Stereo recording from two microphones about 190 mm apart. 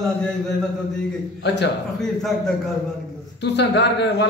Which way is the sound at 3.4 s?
65° left (ahead or behind).